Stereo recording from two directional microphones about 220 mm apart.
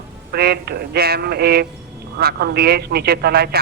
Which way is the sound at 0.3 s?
45° right (ahead or behind).